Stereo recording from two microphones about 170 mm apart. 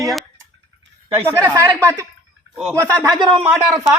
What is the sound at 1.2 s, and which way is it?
A woman's voice, 15° right (ahead or behind).